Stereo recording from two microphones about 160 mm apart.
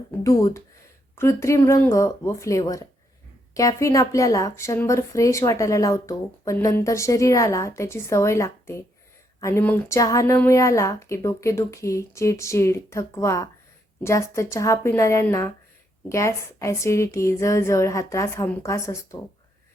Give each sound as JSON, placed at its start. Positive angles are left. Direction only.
{"t": 0.2, "sound": "speech", "side_deg": 20}